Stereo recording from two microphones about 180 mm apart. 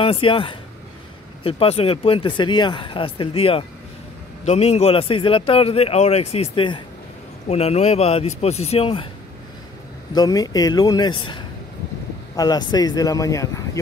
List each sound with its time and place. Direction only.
0.0 s speech: 30° left (ahead or behind)
10.1 s speech: 20° left (ahead or behind)